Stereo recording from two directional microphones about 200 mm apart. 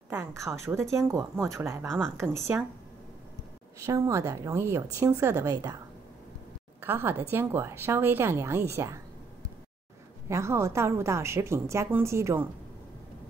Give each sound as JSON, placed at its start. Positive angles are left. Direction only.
{"t": 0.1, "sound": "a woman's voice", "side_deg": -15}
{"t": 1.9, "sound": "speech", "side_deg": 0}
{"t": 2.1, "sound": "a woman's voice", "side_deg": -15}
{"t": 3.8, "sound": "a woman's voice", "side_deg": -15}
{"t": 6.8, "sound": "a woman's voice", "side_deg": -10}
{"t": 10.2, "sound": "a woman's voice", "side_deg": -15}